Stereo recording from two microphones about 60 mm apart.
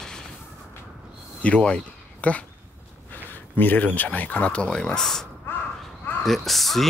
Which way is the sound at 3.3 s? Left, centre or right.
Left.